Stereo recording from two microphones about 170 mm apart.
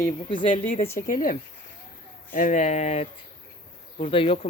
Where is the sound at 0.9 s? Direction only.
50° left (ahead or behind).